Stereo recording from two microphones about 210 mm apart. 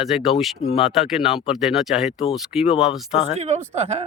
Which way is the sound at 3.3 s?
30° right (ahead or behind).